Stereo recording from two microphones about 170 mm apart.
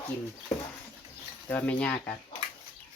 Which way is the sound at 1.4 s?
10° left (ahead or behind).